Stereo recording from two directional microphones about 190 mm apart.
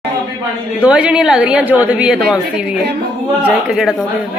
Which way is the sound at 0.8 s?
5° right (ahead or behind).